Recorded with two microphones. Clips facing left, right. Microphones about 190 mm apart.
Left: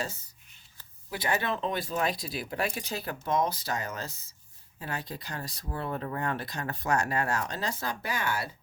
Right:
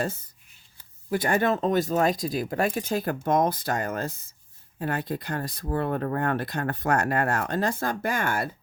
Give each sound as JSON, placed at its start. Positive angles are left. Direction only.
{"t": 0.0, "sound": "speech", "side_deg": -55}